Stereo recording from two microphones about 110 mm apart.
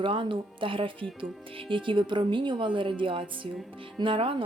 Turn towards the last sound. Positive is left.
turn(degrees=-50)  # may be behind; listen again after turning